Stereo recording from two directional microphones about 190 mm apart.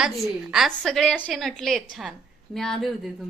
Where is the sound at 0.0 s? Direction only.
5° right (ahead or behind).